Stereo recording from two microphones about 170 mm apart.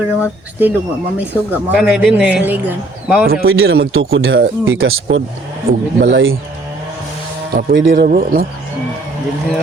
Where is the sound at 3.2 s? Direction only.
60° right (ahead or behind).